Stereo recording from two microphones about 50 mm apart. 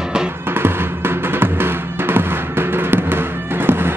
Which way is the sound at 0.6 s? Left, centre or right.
Right.